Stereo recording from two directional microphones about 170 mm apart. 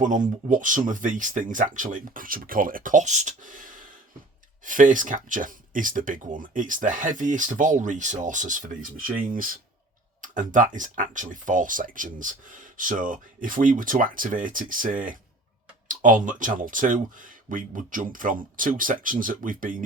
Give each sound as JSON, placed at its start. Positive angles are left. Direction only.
{"t": 0.0, "sound": "speech", "side_deg": -50}